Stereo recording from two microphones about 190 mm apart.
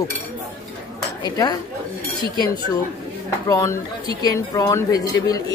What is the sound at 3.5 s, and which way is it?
Speech, 15° left (ahead or behind).